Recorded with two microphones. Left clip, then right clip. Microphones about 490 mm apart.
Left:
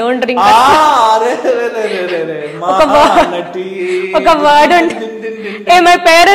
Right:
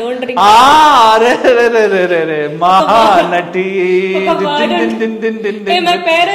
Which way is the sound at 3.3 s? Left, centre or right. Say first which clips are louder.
Right 5 dB; right.